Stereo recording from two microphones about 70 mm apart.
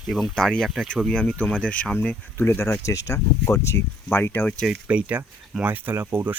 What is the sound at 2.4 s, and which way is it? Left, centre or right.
Speech, left.